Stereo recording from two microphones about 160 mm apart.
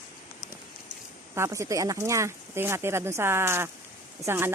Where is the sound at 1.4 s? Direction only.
20° right (ahead or behind).